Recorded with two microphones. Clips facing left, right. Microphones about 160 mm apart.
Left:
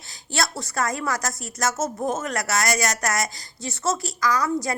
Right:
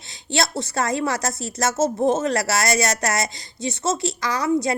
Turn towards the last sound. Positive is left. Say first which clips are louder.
# right 2 dB
turn(degrees=-25)  # may be behind; listen again after turning